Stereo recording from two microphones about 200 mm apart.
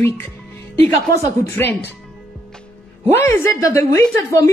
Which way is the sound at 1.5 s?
10° left (ahead or behind).